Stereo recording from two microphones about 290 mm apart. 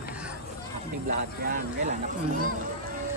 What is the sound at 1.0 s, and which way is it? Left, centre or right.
Speech, right.